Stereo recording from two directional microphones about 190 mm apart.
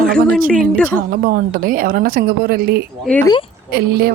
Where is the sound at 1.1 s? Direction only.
50° right (ahead or behind).